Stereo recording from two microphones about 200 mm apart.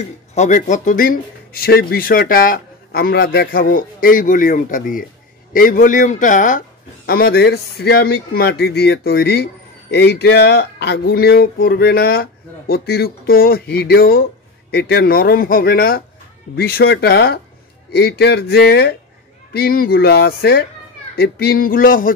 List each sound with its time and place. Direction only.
0.3 s a man's voice: 35° left (ahead or behind)
7.1 s speech: 50° left (ahead or behind)